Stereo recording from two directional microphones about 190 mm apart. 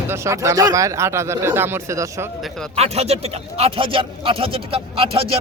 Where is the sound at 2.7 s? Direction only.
35° right (ahead or behind).